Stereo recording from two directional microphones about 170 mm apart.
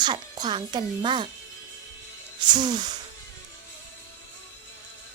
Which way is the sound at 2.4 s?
25° right (ahead or behind).